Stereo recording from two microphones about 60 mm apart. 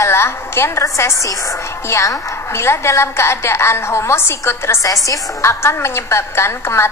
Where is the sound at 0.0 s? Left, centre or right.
Left.